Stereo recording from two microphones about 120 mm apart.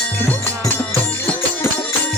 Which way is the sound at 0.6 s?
15° left (ahead or behind).